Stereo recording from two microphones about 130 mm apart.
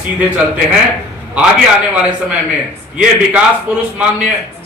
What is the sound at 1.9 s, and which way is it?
Speech, 10° right (ahead or behind).